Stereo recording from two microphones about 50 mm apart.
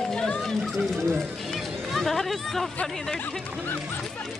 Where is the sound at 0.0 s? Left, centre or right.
Centre.